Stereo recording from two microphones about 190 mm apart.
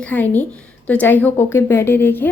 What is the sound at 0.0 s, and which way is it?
A woman's voice, 10° left (ahead or behind).